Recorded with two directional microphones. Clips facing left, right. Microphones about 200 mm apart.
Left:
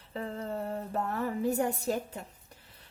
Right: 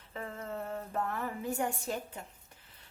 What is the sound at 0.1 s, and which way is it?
A woman's voice, 35° left (ahead or behind).